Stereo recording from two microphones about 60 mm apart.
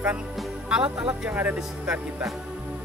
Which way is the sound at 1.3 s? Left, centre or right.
Right.